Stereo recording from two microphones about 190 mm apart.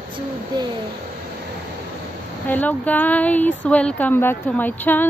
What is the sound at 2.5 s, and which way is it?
A woman's voice, 10° left (ahead or behind).